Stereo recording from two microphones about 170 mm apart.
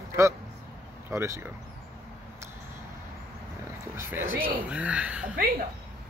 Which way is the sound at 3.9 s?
15° right (ahead or behind).